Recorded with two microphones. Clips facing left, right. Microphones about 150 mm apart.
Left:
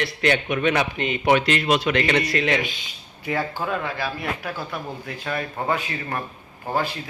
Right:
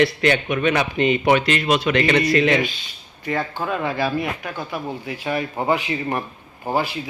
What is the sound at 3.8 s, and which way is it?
Speech, 15° right (ahead or behind).